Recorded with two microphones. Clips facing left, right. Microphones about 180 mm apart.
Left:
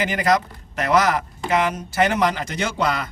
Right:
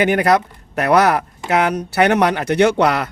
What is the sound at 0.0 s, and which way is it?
A man's voice, 60° right (ahead or behind).